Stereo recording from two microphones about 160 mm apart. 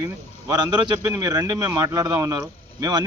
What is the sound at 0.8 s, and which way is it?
A man's voice, 15° right (ahead or behind).